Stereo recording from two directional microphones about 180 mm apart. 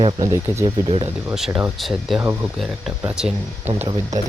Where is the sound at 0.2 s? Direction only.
20° right (ahead or behind).